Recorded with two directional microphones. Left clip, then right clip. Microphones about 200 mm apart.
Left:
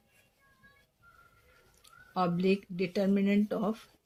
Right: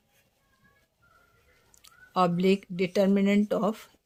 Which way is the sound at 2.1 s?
50° right (ahead or behind).